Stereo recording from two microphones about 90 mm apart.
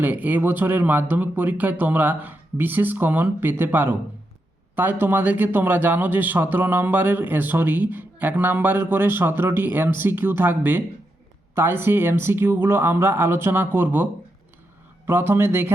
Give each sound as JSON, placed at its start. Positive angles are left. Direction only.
{"t": 0.0, "sound": "speech", "side_deg": -20}